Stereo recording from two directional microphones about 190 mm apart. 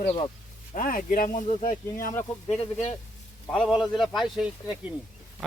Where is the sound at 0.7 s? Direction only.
45° left (ahead or behind).